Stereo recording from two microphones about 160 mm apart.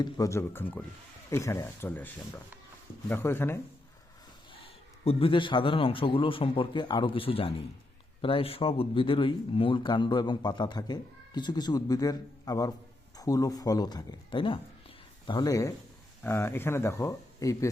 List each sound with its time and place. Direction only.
0.0 s speech: 20° left (ahead or behind)
3.1 s speech: 15° left (ahead or behind)
5.0 s a man's voice: 35° left (ahead or behind)